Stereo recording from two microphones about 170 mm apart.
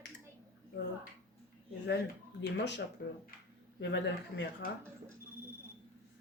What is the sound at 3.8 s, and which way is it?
Speech, 90° left.